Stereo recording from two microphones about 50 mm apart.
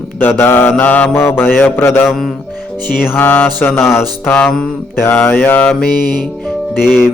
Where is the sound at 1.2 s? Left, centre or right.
Left.